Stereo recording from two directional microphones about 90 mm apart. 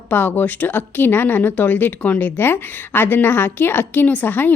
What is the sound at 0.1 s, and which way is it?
Speech, 20° left (ahead or behind).